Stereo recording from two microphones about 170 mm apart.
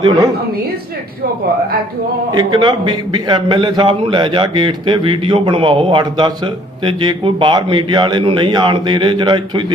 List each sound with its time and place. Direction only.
2.3 s a man's voice: 25° right (ahead or behind)